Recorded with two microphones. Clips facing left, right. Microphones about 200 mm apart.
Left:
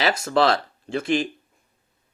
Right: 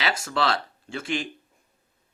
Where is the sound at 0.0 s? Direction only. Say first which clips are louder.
Left 6 dB; 40° left (ahead or behind).